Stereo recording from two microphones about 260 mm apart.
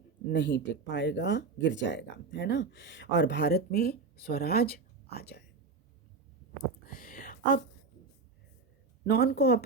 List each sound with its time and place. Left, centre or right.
0.3 s speech: left
6.8 s a sound: left
9.0 s speech: left